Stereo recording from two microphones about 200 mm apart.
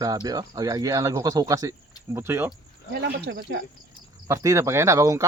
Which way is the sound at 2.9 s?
55° right (ahead or behind).